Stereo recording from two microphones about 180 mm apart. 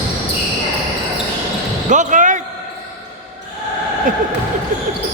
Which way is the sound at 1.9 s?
45° right (ahead or behind).